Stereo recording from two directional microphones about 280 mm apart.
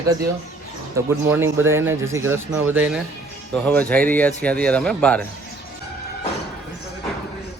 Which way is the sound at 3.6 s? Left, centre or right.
Centre.